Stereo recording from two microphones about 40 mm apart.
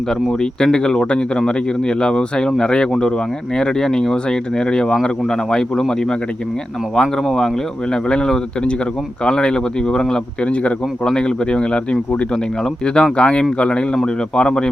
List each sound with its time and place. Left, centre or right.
0.1 s speech: centre
6.9 s speech: centre
10.4 s speech: left
11.0 s speech: centre